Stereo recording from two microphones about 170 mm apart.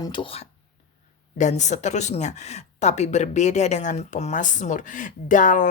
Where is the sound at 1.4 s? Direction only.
45° left (ahead or behind).